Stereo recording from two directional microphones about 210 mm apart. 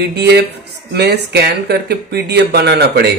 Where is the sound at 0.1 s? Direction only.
50° right (ahead or behind).